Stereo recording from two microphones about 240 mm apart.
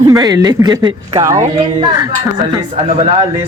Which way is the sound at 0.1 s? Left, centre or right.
Centre.